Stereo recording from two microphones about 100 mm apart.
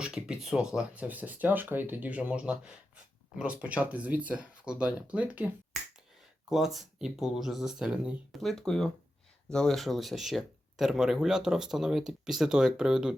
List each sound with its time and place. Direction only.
0.0 s speech: 10° right (ahead or behind)
6.7 s speech: centre (ahead or behind)